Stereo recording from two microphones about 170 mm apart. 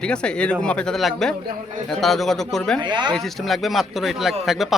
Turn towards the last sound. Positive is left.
turn(degrees=0)  # may be behind; listen again after turning